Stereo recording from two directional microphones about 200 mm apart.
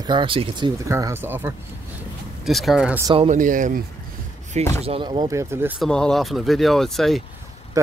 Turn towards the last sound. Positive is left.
turn(degrees=-15)  # may be behind; listen again after turning